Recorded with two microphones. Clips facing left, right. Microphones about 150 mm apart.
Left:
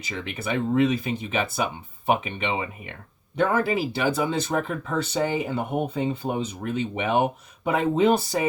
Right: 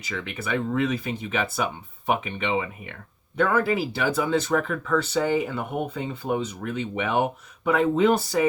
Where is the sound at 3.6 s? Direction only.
20° left (ahead or behind).